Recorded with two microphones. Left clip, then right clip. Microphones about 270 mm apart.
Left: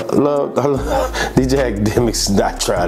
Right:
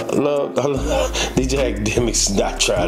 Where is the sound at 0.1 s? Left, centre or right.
Left.